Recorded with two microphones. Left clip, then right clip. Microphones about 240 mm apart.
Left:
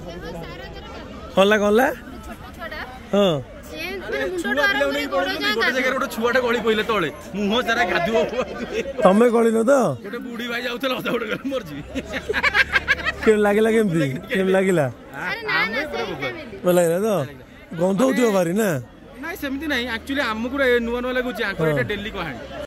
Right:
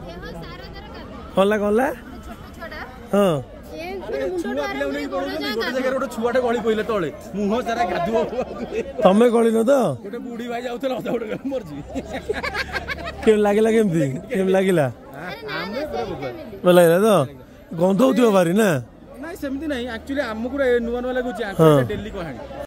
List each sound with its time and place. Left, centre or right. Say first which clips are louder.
1.3 s a man's voice: left 2 dB; centre
2.6 s a sound: left 2 dB; centre
4.5 s a man's voice: left 5 dB; centre
5.8 s a man's voice: left 1 dB; centre
12.4 s vehicle: left 8 dB; right
13.2 s a man's voice: right 2 dB; centre
15.6 s chatter: left 3 dB; right
16.6 s speech: right 4 dB; centre
19.2 s a man's voice: left 1 dB; centre